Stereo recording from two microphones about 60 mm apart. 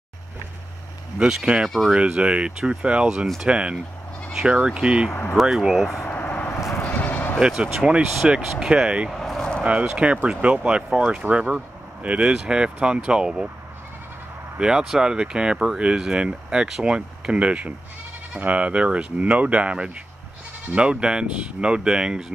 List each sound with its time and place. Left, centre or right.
1.2 s speech: centre
5.3 s speech: centre
6.0 s vehicle: left
6.9 s bleat: left
7.3 s speech: centre
9.1 s a sound: centre
9.7 s speech: centre
11.2 s speech: right
14.6 s speech: centre